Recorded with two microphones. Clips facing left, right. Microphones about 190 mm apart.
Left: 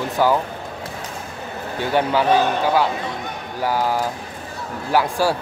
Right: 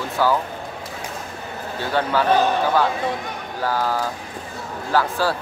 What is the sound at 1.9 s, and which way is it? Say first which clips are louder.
Speech: left 2 dB; 15° left (ahead or behind).